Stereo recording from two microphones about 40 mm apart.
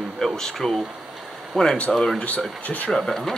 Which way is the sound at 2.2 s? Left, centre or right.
Left.